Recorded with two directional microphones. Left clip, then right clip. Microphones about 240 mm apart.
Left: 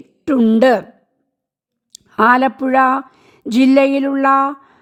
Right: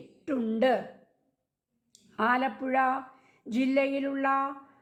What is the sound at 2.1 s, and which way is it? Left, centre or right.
A woman's voice, left.